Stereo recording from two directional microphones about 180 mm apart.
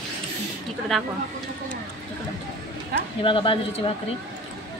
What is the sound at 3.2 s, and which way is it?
Speech, 30° left (ahead or behind).